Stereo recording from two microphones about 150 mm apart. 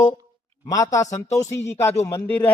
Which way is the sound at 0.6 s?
20° left (ahead or behind).